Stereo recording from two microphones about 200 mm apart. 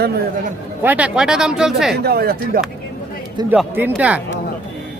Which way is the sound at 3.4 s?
10° right (ahead or behind).